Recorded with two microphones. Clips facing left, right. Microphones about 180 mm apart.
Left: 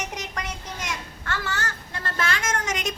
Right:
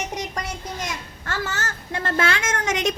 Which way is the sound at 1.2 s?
40° right (ahead or behind).